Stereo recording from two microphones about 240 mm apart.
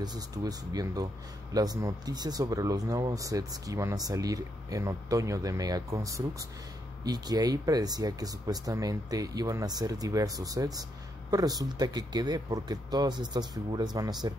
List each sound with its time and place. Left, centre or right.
0.0 s speech: centre